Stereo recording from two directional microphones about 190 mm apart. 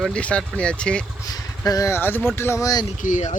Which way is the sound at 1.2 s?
20° left (ahead or behind).